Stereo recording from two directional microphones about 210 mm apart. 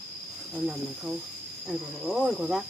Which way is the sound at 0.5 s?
Centre (ahead or behind).